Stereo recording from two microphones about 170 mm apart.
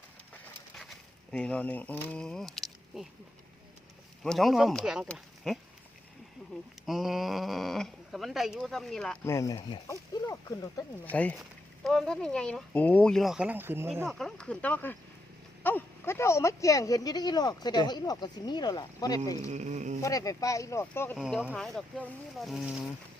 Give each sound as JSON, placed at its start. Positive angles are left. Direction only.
{"t": 0.8, "sound": "speech", "side_deg": 5}
{"t": 4.2, "sound": "speech", "side_deg": 0}
{"t": 6.8, "sound": "speech", "side_deg": 0}
{"t": 9.2, "sound": "speech", "side_deg": 15}
{"t": 11.0, "sound": "speech", "side_deg": 10}
{"t": 14.0, "sound": "speech", "side_deg": 0}
{"t": 19.5, "sound": "insect", "side_deg": -45}
{"t": 20.0, "sound": "speech", "side_deg": 20}
{"t": 21.2, "sound": "speech", "side_deg": 5}